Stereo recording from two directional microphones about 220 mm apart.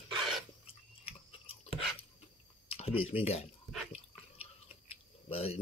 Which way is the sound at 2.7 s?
25° left (ahead or behind).